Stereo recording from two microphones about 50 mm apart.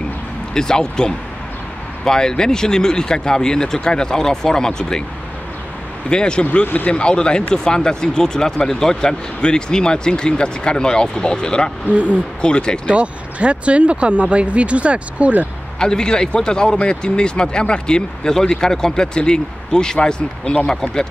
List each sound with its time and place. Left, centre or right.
0.6 s speech: centre
6.0 s speech: centre
6.6 s speech: left
6.9 s speech: centre
11.9 s speech: right
12.4 s speech: centre
12.8 s speech: right
15.8 s speech: centre